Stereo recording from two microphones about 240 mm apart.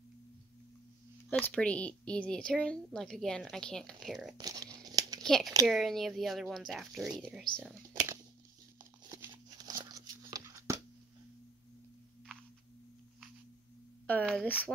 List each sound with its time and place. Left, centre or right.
1.3 s a woman's voice: centre
4.4 s crumpling: centre
5.2 s a woman's voice: centre
7.9 s a sound: centre
14.0 s a woman's voice: centre